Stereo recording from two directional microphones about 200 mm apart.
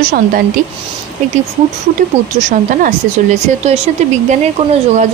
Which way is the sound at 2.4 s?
40° right (ahead or behind).